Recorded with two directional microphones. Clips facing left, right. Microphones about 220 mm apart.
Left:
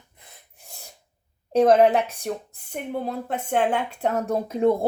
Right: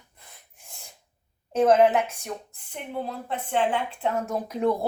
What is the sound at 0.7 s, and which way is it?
Sneeze, 40° left (ahead or behind).